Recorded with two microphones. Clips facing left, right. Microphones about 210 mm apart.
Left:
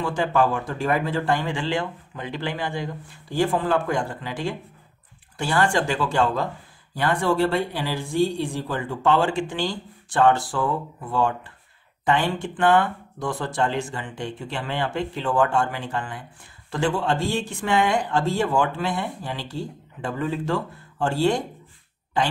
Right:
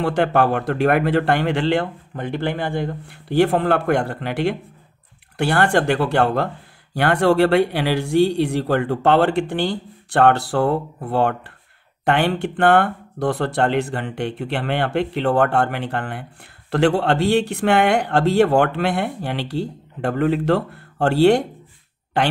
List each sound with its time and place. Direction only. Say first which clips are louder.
0.0 s speech: right 4 dB; 65° right (ahead or behind)